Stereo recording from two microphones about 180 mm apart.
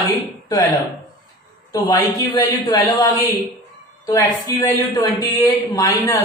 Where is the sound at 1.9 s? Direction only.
25° left (ahead or behind).